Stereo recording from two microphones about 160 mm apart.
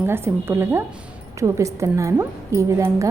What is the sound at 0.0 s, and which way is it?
A woman's voice, 15° right (ahead or behind).